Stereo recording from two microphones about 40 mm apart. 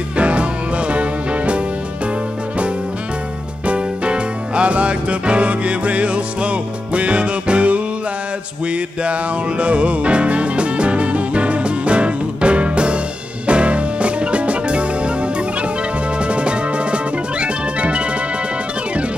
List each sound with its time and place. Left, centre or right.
0.2 s music: right
3.6 s music: right
9.6 s music: right
16.3 s music: right